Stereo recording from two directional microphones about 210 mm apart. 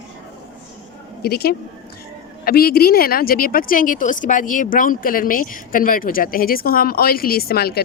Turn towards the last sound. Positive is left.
turn(degrees=45)  # may be behind; listen again after turning